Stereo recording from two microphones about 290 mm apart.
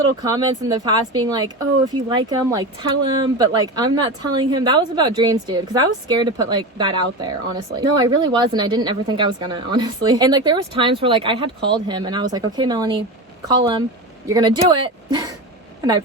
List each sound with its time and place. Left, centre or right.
0.2 s a woman's voice: centre
14.3 s a woman's voice: centre